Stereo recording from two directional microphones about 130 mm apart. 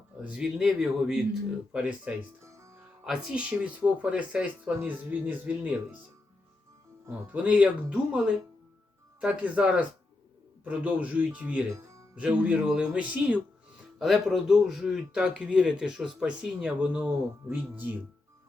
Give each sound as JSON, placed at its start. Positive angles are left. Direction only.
{"t": 0.2, "sound": "speech", "side_deg": -10}
{"t": 2.4, "sound": "music", "side_deg": -25}
{"t": 3.0, "sound": "speech", "side_deg": -5}
{"t": 7.3, "sound": "speech", "side_deg": -10}
{"t": 9.2, "sound": "speech", "side_deg": -10}